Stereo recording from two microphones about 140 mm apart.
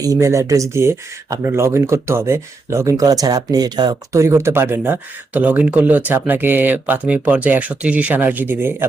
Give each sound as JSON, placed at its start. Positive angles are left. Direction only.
{"t": 0.0, "sound": "speech", "side_deg": -25}